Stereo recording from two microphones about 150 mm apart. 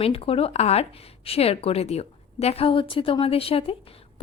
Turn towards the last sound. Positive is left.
turn(degrees=40)  # may be behind; listen again after turning